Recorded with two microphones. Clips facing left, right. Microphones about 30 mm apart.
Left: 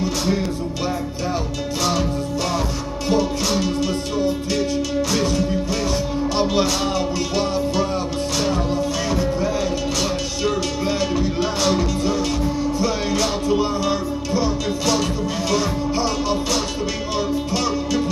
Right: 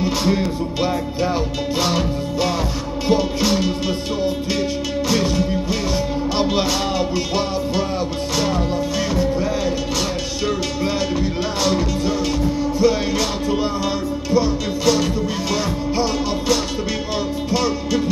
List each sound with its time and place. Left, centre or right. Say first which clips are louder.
0.0 s music: right 2 dB; centre
3.1 s music: right 2 dB; centre
10.4 s music: even; centre